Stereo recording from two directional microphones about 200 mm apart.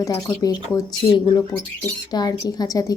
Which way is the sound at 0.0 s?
15° left (ahead or behind).